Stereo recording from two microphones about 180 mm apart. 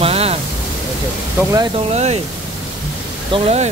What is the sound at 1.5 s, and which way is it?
Speech, 25° right (ahead or behind).